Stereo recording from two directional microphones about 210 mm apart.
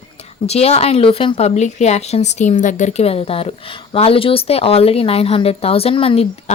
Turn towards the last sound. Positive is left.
turn(degrees=25)  # may be behind; listen again after turning